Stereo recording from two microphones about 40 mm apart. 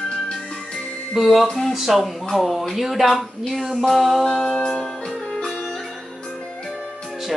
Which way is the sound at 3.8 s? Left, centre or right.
Centre.